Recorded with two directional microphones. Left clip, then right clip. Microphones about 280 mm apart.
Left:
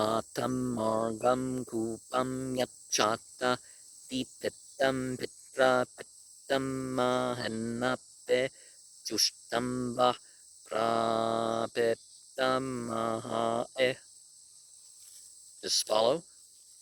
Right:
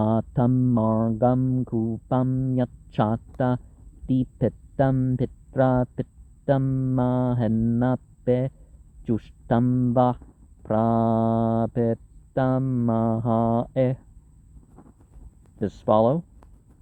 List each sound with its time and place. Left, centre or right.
0.0 s speech: left
16.0 s speech: left